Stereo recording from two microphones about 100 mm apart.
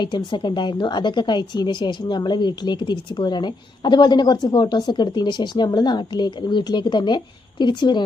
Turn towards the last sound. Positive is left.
turn(degrees=50)  # may be behind; listen again after turning